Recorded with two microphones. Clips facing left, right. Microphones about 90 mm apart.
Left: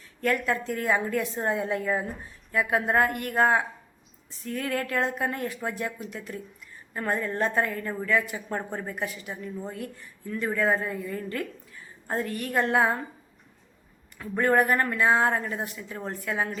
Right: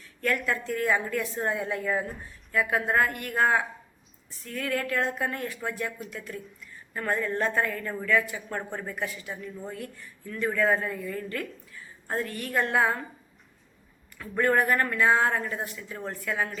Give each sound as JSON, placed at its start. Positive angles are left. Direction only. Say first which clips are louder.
{"t": 0.2, "sound": "speech", "louder": "left 2 dB", "side_deg": 25}
{"t": 14.2, "sound": "speech", "louder": "left 2 dB", "side_deg": 25}